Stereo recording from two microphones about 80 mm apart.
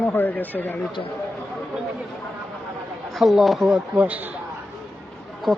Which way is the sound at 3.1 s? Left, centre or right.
Centre.